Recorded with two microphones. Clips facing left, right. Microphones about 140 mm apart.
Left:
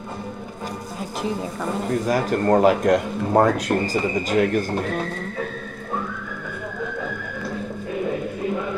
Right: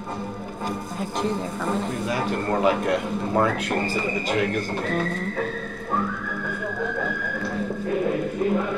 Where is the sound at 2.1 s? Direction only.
40° left (ahead or behind).